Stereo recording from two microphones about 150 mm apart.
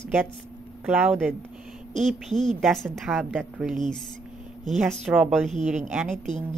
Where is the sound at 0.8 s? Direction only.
10° right (ahead or behind).